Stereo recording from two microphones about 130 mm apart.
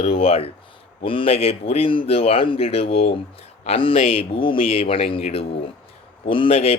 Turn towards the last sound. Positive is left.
turn(degrees=50)  # may be behind; listen again after turning